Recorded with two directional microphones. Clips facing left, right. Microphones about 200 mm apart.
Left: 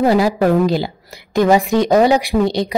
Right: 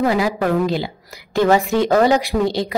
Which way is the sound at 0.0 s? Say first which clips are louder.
Left 4 dB; 35° left (ahead or behind).